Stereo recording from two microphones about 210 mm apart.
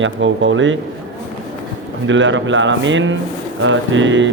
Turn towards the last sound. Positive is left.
turn(degrees=-65)  # may be behind; listen again after turning